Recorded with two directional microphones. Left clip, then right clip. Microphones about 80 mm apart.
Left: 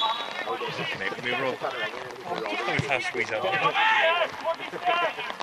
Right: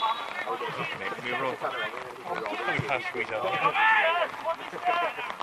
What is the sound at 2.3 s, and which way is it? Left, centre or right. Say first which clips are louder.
Speech: left 2 dB; left.